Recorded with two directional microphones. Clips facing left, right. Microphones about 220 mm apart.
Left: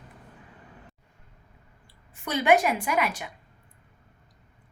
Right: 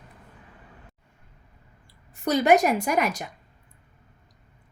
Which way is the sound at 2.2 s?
40° right (ahead or behind).